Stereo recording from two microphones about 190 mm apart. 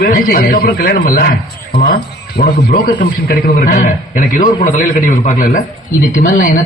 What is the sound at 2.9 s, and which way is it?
A man's voice, 55° left (ahead or behind).